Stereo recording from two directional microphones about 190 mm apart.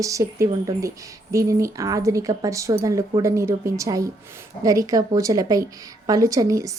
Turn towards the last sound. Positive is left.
turn(degrees=-15)  # may be behind; listen again after turning